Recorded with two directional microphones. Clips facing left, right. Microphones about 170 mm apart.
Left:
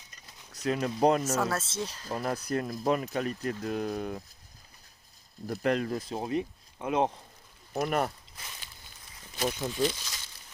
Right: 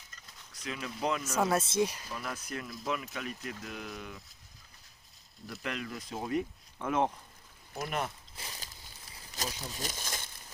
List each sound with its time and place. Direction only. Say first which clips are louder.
0.5 s speech: left 10 dB; 40° left (ahead or behind)
1.4 s speech: right 3 dB; 15° right (ahead or behind)
2.0 s speech: left 8 dB; 40° left (ahead or behind)
5.5 s speech: left 10 dB; 40° left (ahead or behind)
6.1 s speech: right 2 dB; 25° left (ahead or behind)
7.9 s speech: left 6 dB; 50° left (ahead or behind)
8.4 s a sound: right 1 dB; 35° right (ahead or behind)
9.4 s speech: left 8 dB; 40° right (ahead or behind)
9.8 s crumpling: left 11 dB; 50° right (ahead or behind)